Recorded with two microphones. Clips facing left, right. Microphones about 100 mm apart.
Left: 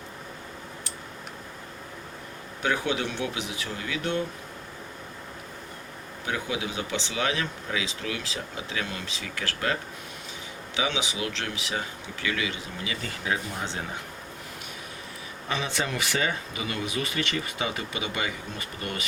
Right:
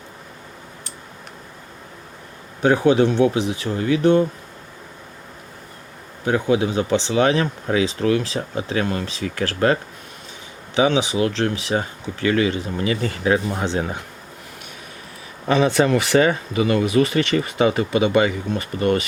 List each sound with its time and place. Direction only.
2.6 s speech: 35° right (ahead or behind)
6.2 s speech: 40° right (ahead or behind)
10.8 s speech: 40° right (ahead or behind)
13.2 s speech: 70° right (ahead or behind)
15.4 s speech: 55° right (ahead or behind)